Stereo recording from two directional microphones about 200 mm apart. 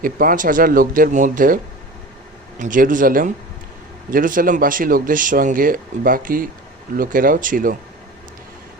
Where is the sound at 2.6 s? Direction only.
40° right (ahead or behind).